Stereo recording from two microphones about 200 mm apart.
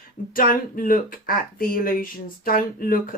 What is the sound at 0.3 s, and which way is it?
Speech, 45° left (ahead or behind).